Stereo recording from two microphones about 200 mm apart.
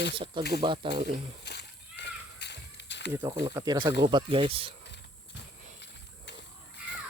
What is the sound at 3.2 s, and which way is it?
Speech, 20° right (ahead or behind).